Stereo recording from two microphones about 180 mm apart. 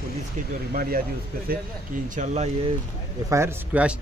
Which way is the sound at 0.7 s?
55° right (ahead or behind).